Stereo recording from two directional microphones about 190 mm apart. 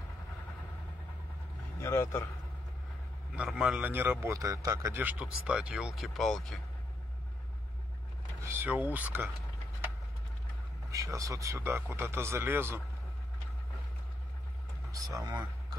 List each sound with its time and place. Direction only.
1.8 s a man's voice: 15° left (ahead or behind)
3.3 s a man's voice: 5° right (ahead or behind)
8.5 s a man's voice: 10° right (ahead or behind)
10.9 s a man's voice: 15° right (ahead or behind)
14.9 s speech: 15° right (ahead or behind)